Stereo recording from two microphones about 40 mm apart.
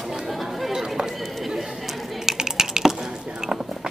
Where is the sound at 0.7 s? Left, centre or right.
Centre.